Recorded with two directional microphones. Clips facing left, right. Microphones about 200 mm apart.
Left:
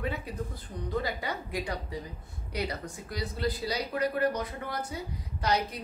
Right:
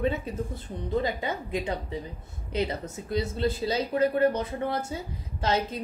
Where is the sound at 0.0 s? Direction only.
25° right (ahead or behind).